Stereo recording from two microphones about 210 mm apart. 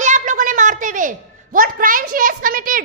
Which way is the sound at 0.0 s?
35° right (ahead or behind).